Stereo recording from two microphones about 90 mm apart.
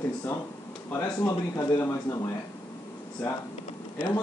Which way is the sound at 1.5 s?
40° left (ahead or behind).